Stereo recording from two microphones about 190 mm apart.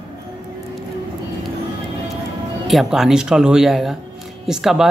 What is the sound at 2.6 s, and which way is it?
Speech, centre (ahead or behind).